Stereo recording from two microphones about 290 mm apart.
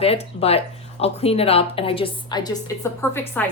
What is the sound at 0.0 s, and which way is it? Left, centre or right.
Speech, left.